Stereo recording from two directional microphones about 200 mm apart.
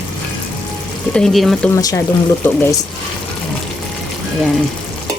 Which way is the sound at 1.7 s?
15° left (ahead or behind).